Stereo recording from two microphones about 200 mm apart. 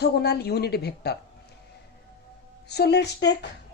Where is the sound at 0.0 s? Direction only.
55° left (ahead or behind).